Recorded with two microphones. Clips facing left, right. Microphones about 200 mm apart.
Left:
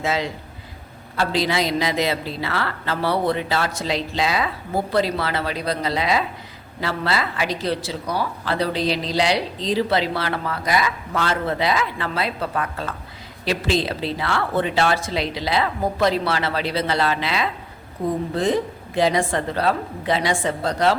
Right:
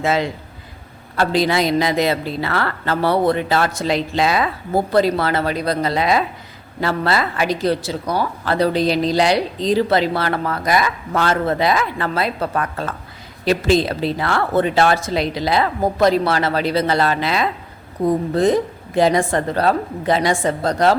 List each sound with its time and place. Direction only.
0.0 s a man's voice: 55° right (ahead or behind)